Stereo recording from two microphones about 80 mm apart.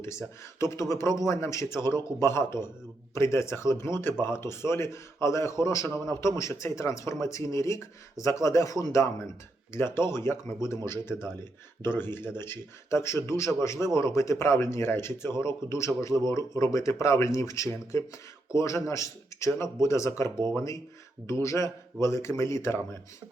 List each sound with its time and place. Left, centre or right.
0.6 s a man's voice: left